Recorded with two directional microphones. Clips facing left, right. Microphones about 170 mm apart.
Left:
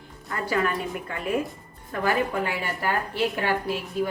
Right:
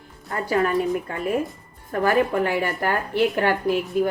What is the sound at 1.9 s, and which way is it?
A woman's voice, 50° right (ahead or behind).